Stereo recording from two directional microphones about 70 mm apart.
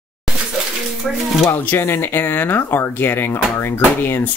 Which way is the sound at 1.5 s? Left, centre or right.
Left.